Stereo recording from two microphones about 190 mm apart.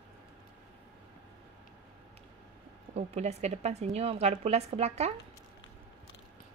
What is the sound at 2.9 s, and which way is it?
Speech, 35° right (ahead or behind).